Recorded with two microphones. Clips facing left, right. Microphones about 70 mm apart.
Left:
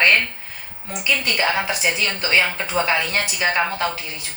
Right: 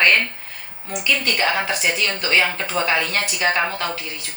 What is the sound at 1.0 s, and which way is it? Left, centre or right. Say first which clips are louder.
Speech: even; centre.